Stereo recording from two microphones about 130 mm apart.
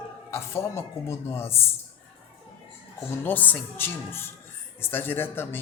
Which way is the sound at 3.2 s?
15° left (ahead or behind).